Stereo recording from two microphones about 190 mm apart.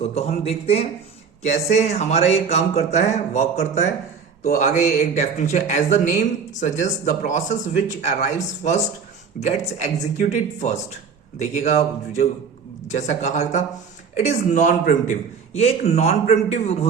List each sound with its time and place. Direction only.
0.1 s speech: 35° left (ahead or behind)
4.9 s speech: 35° left (ahead or behind)